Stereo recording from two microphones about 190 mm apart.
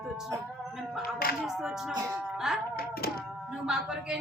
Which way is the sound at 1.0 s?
50° left (ahead or behind).